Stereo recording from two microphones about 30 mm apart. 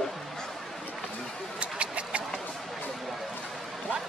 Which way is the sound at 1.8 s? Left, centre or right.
Right.